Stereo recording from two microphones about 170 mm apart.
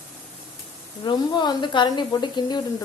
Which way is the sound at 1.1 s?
25° left (ahead or behind).